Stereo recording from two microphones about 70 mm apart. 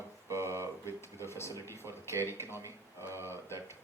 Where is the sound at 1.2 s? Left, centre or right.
Left.